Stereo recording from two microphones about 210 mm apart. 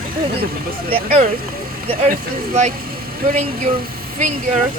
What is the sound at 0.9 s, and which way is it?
Speech, 30° right (ahead or behind).